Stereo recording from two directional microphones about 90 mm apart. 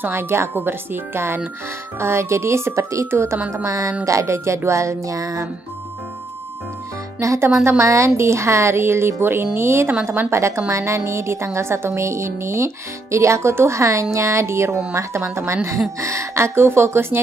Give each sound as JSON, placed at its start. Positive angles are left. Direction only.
{"t": 0.0, "sound": "speech", "side_deg": -25}
{"t": 7.2, "sound": "speech", "side_deg": -30}